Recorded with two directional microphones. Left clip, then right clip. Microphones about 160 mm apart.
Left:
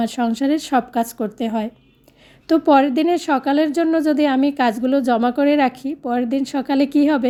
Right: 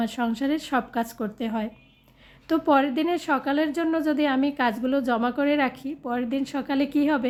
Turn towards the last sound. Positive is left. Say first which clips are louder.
# left 7 dB
turn(degrees=35)  # may be behind; listen again after turning